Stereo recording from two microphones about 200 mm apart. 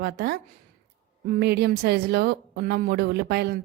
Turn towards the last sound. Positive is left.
turn(degrees=-55)  # may be behind; listen again after turning